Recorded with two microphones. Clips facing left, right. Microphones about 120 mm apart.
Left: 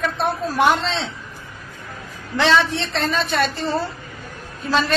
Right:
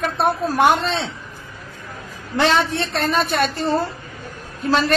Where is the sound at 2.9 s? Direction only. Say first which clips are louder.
Right 1 dB; 55° right (ahead or behind).